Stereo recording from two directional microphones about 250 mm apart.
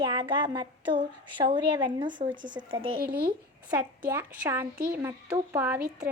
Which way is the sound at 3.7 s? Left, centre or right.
Centre.